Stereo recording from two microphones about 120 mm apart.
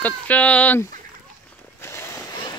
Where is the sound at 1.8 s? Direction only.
25° left (ahead or behind).